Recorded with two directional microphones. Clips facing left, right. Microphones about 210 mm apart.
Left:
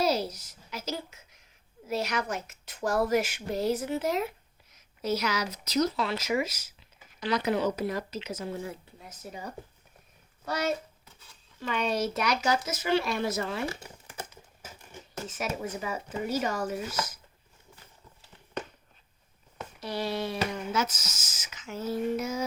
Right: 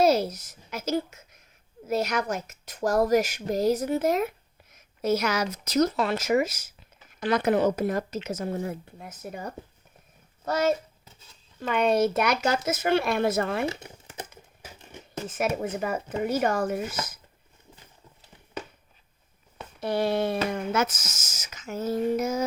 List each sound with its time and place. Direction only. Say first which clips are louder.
0.0 s a sound: right 6 dB; 50° right (ahead or behind)
1.9 s speech: right 4 dB; 45° right (ahead or behind)
13.7 s crumpling: right 5 dB; 20° right (ahead or behind)
15.3 s speech: right 6 dB; 55° right (ahead or behind)
19.8 s speech: right 7 dB; 55° right (ahead or behind)